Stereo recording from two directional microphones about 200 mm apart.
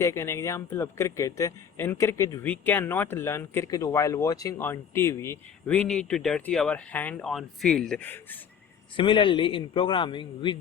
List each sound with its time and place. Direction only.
0.0 s speech: 15° left (ahead or behind)
9.0 s a man's voice: 25° left (ahead or behind)